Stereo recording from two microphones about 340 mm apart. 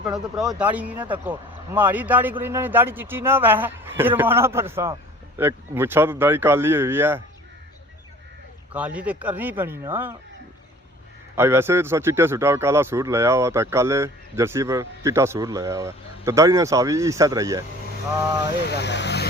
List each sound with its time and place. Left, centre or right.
0.0 s a man's voice: centre
8.7 s speech: centre
11.3 s a man's voice: centre
18.6 s speech: left